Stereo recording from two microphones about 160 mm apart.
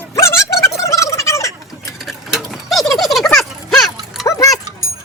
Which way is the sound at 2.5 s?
Centre (ahead or behind).